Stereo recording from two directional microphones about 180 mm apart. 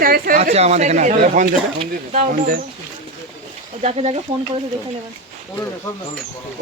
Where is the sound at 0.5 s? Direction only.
35° right (ahead or behind).